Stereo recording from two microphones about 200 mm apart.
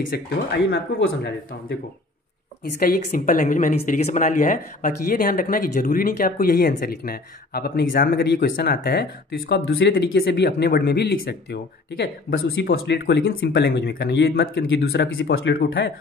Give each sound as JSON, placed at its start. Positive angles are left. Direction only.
{"t": 0.1, "sound": "speech", "side_deg": 50}
{"t": 2.8, "sound": "speech", "side_deg": 40}